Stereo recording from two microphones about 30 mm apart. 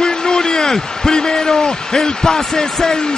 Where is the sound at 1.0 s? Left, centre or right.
Centre.